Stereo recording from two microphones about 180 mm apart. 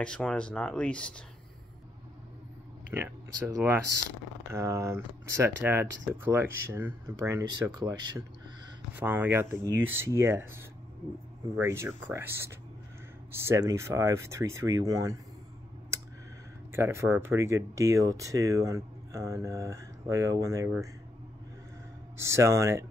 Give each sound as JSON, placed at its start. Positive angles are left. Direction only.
{"t": 0.0, "sound": "speech", "side_deg": 5}
{"t": 2.9, "sound": "speech", "side_deg": -10}
{"t": 8.9, "sound": "speech", "side_deg": -10}
{"t": 16.7, "sound": "speech", "side_deg": -15}
{"t": 22.1, "sound": "speech", "side_deg": -15}